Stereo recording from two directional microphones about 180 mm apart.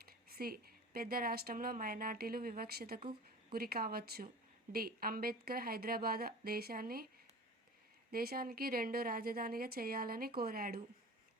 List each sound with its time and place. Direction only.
0.0 s a woman's voice: 55° right (ahead or behind)
8.1 s speech: 55° right (ahead or behind)